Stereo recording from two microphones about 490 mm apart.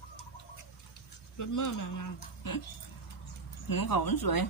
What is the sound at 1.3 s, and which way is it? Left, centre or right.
Speech, left.